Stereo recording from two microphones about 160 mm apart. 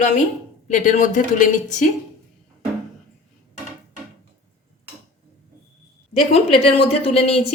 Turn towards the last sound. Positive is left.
turn(degrees=40)  # may be behind; listen again after turning